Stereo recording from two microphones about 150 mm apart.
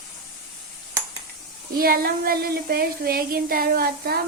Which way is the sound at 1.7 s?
80° right.